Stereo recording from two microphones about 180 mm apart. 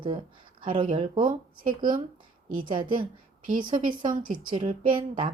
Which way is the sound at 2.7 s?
25° right (ahead or behind).